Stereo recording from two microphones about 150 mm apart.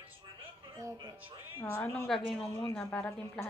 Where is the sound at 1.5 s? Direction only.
15° left (ahead or behind).